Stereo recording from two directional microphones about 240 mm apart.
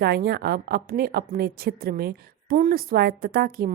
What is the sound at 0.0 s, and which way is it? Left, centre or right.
A woman's voice, right.